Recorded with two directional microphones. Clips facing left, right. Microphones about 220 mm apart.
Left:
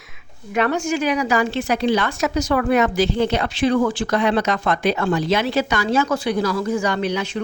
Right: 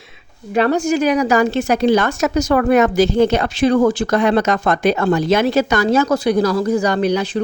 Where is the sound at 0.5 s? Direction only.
35° right (ahead or behind).